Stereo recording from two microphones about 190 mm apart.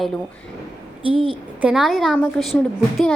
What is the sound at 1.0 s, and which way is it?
Speech, 25° right (ahead or behind).